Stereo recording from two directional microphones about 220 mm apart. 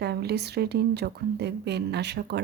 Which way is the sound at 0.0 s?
45° right (ahead or behind).